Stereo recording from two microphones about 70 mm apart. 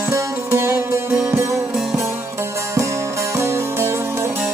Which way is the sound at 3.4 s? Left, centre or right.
Right.